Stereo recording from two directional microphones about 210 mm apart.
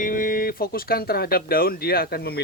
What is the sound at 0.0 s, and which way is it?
Speech, 40° left (ahead or behind).